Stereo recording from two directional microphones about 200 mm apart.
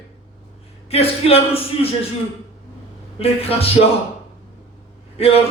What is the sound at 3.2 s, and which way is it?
Speech, 30° left (ahead or behind).